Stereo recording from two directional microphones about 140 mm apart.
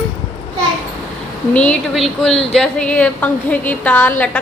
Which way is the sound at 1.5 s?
5° left (ahead or behind).